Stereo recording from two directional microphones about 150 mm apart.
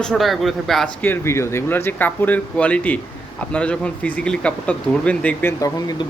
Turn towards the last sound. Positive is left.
turn(degrees=25)  # may be behind; listen again after turning